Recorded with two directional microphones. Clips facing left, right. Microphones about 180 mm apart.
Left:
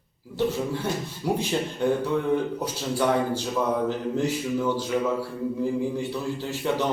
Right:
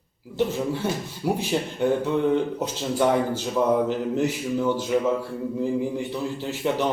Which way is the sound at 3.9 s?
15° right (ahead or behind).